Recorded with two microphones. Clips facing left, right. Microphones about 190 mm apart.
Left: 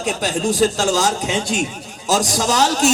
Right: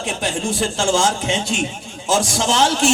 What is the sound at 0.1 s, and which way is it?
Speech, 40° left (ahead or behind).